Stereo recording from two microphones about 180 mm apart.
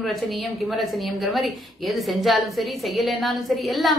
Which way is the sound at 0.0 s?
Centre (ahead or behind).